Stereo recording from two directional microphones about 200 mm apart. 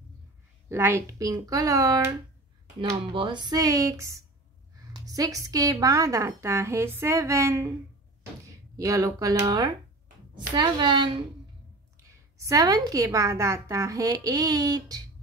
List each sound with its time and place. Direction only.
0.7 s a woman's voice: 15° right (ahead or behind)
8.7 s a woman's voice: 15° right (ahead or behind)